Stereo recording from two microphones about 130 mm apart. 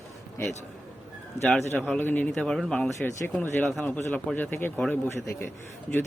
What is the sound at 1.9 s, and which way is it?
Speech, 15° left (ahead or behind).